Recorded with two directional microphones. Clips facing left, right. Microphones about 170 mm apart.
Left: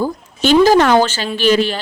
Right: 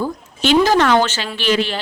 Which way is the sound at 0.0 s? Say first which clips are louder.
Left 3 dB; 35° left (ahead or behind).